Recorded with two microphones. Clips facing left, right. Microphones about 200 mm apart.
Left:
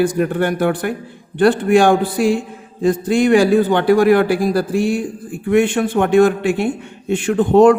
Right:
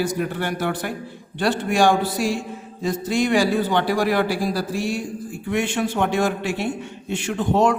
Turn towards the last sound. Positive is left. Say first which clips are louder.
# left 9 dB
turn(degrees=55)  # may be behind; listen again after turning